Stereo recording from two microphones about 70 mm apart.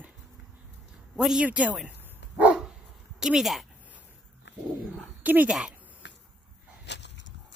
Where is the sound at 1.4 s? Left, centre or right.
Centre.